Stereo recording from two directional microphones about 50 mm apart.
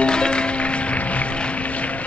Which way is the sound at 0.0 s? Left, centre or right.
Centre.